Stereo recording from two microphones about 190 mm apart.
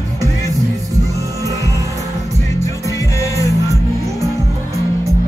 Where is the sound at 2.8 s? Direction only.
15° left (ahead or behind).